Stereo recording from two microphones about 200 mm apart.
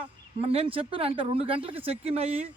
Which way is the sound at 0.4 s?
30° right (ahead or behind).